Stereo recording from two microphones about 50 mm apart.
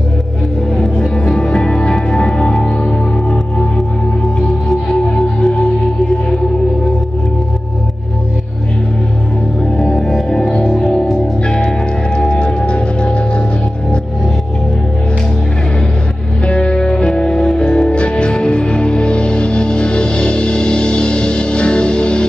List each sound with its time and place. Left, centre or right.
0.7 s music: centre
9.6 s music: centre
16.4 s music: left